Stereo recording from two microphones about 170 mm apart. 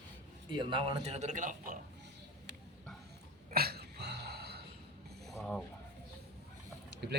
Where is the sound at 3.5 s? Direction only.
65° right (ahead or behind).